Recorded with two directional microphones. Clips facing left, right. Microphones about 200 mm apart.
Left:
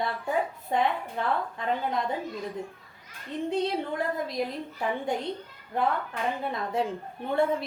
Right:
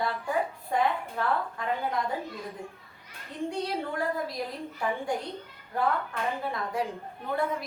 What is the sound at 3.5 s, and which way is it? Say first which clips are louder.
Speech: left 5 dB; 20° left (ahead or behind).